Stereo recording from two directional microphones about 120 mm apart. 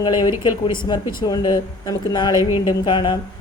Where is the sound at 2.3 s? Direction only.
25° right (ahead or behind).